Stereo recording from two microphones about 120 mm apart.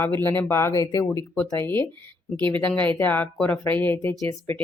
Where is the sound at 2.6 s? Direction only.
15° left (ahead or behind).